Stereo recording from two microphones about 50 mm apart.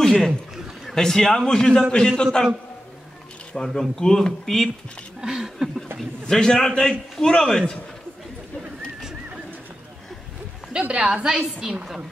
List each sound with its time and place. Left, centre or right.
0.0 s chuckle: centre
0.8 s a man's voice: centre
3.5 s a man's voice: centre
5.2 s a woman's voice: centre
6.2 s a man's voice: centre
10.8 s a woman's voice: right